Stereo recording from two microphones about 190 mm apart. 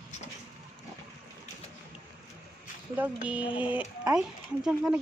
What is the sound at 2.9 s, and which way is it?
Speech, 10° right (ahead or behind).